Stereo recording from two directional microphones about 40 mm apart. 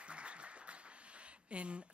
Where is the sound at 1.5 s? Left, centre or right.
Right.